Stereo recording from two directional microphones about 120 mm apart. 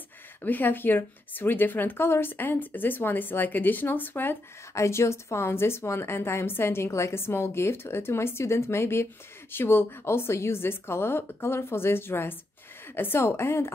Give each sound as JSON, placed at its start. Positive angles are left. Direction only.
{"t": 0.4, "sound": "speech", "side_deg": 15}